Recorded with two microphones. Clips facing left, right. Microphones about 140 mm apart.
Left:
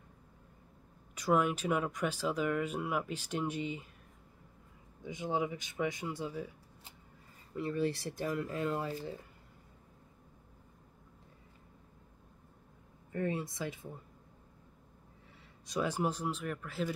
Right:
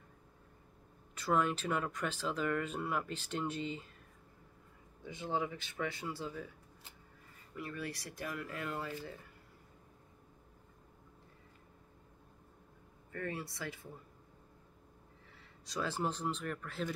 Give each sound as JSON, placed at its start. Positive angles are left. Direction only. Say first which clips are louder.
{"t": 1.1, "sound": "speech", "louder": "left 3 dB", "side_deg": 15}
{"t": 5.0, "sound": "speech", "louder": "left 3 dB", "side_deg": 15}
{"t": 7.5, "sound": "speech", "louder": "left 9 dB", "side_deg": 30}
{"t": 13.1, "sound": "speech", "louder": "left 6 dB", "side_deg": 20}
{"t": 15.6, "sound": "speech", "louder": "left 4 dB", "side_deg": 15}